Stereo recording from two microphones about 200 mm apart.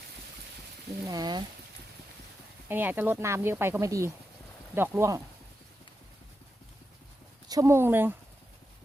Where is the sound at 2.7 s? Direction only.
10° right (ahead or behind).